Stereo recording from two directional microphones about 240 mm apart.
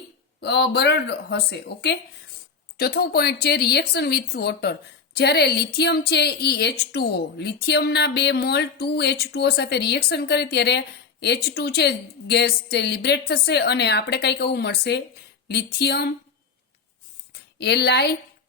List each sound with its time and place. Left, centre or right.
0.3 s a woman's voice: left
17.6 s a woman's voice: left